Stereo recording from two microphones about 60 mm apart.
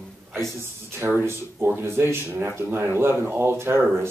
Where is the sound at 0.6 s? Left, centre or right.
Right.